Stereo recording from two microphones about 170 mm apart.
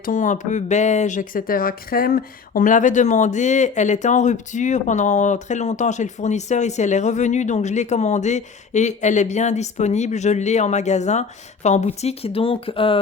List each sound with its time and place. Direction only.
0.0 s speech: 50° left (ahead or behind); by 13.0 s 30° left (ahead or behind)